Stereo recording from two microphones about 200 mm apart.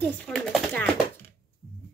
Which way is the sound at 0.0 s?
5° left (ahead or behind).